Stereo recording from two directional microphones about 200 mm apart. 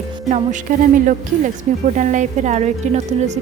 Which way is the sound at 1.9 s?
40° right (ahead or behind).